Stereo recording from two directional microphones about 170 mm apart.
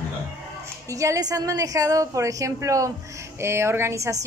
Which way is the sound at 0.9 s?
20° right (ahead or behind).